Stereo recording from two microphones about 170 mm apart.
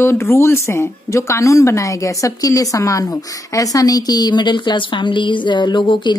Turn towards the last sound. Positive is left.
turn(degrees=30)  # may be behind; listen again after turning